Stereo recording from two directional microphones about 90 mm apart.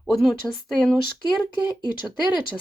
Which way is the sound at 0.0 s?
Centre (ahead or behind).